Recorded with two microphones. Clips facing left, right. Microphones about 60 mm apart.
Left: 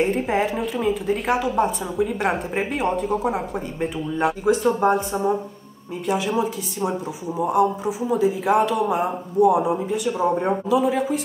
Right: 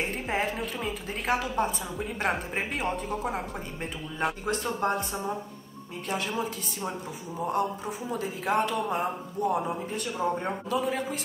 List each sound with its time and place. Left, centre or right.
0.0 s a woman's voice: centre
10.2 s speech: centre
10.7 s a woman's voice: centre